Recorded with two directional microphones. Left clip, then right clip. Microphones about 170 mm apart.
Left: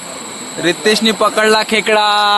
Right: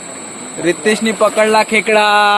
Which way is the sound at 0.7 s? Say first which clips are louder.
Left 2 dB; 5° left (ahead or behind).